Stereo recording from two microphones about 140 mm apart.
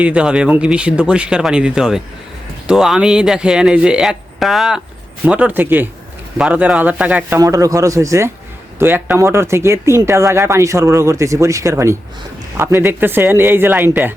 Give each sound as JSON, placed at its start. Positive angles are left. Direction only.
{"t": 0.0, "sound": "speech", "side_deg": -10}
{"t": 7.3, "sound": "speech", "side_deg": -25}